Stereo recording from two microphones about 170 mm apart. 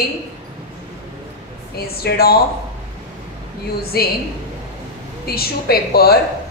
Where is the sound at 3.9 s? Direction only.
65° left (ahead or behind).